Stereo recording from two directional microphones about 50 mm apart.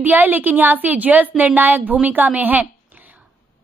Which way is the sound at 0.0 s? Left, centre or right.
Right.